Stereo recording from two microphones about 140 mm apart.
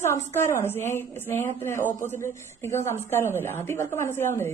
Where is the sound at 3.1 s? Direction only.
15° left (ahead or behind).